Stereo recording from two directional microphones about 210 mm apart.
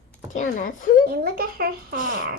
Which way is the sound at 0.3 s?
40° left (ahead or behind).